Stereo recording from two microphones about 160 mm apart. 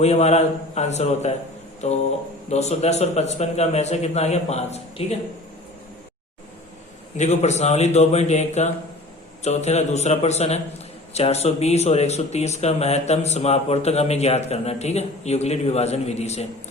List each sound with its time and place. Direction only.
0.0 s speech: 40° left (ahead or behind)
2.5 s speech: 45° left (ahead or behind)
7.2 s speech: 45° left (ahead or behind)